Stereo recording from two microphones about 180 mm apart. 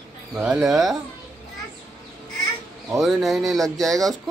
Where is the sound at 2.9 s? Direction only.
Centre (ahead or behind).